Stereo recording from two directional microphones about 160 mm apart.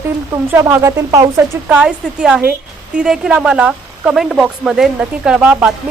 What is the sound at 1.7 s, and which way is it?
Speech, 5° right (ahead or behind).